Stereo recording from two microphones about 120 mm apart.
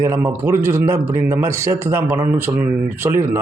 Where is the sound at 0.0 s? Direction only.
20° right (ahead or behind).